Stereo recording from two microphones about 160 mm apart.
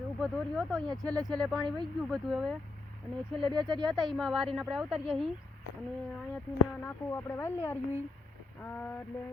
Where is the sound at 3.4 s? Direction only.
25° right (ahead or behind).